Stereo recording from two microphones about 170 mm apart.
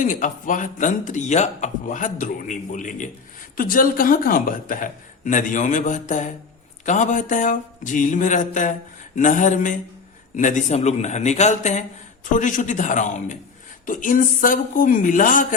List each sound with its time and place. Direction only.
0.0 s a man's voice: 50° left (ahead or behind)